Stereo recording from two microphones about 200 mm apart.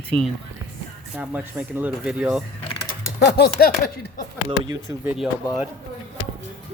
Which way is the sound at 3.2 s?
55° left (ahead or behind).